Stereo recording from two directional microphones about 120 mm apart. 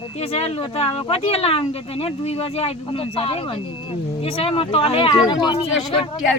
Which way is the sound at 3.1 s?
50° left (ahead or behind).